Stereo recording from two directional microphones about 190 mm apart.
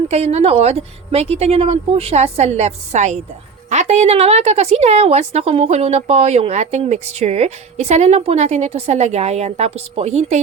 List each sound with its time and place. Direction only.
0.1 s a woman's voice: 35° right (ahead or behind)